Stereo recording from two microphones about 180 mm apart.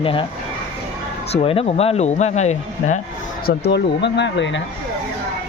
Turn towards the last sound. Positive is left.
turn(degrees=85)